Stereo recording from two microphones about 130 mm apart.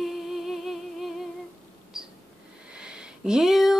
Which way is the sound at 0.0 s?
Centre (ahead or behind).